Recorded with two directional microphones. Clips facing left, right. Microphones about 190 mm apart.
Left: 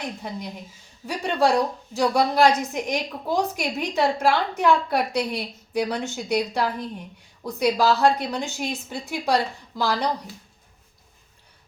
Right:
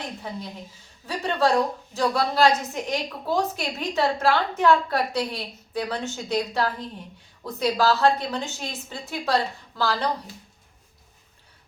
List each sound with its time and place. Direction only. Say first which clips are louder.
0.2 s a woman's voice: left 1 dB; 15° left (ahead or behind)